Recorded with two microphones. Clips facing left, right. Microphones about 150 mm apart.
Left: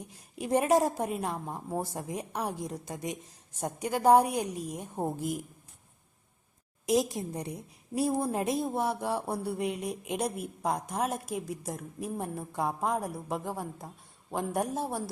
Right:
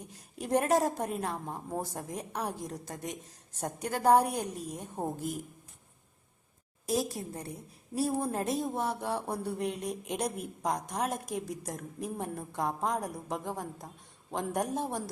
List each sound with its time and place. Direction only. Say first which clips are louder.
0.3 s speech: left 2 dB; 10° left (ahead or behind)
6.8 s a woman's voice: left 4 dB; 20° left (ahead or behind)